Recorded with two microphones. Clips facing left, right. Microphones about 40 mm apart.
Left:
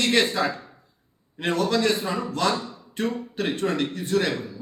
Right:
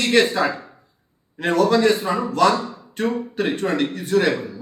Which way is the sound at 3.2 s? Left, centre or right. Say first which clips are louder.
Right 4 dB; centre.